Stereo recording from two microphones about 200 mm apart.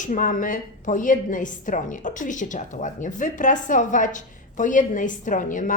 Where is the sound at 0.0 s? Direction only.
40° left (ahead or behind).